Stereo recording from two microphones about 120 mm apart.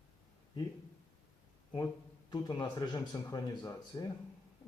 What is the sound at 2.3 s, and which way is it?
Speech, 35° left (ahead or behind).